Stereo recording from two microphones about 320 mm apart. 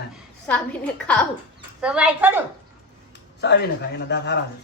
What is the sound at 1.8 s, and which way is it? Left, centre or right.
Speech, centre.